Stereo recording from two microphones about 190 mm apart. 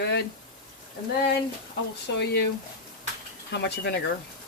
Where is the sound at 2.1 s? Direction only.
60° left (ahead or behind).